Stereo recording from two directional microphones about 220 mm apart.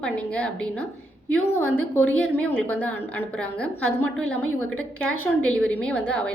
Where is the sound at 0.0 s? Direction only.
5° left (ahead or behind).